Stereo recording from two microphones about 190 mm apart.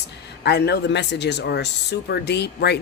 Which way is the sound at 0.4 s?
60° left (ahead or behind).